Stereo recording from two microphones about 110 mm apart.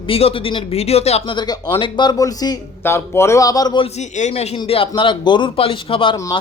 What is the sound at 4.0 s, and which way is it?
Speech, 90° left.